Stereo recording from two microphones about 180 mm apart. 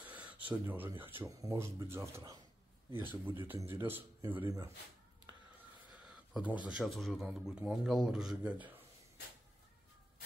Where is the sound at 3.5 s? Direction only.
15° right (ahead or behind).